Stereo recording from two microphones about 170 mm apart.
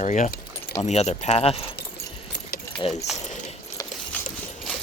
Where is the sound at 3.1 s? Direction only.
5° right (ahead or behind).